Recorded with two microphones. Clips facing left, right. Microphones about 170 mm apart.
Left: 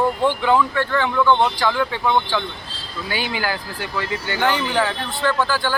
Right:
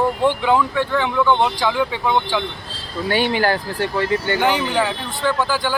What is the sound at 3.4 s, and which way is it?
Speech, 40° right (ahead or behind).